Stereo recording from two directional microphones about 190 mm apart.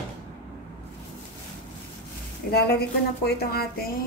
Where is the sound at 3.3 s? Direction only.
55° left (ahead or behind).